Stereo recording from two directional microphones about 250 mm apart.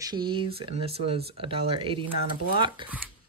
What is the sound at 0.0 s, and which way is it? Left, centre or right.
Speech, centre.